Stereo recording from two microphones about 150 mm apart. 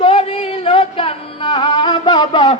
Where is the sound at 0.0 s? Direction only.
35° left (ahead or behind).